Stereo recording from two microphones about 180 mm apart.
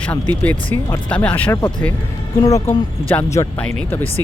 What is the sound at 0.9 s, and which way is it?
Speech, 10° left (ahead or behind).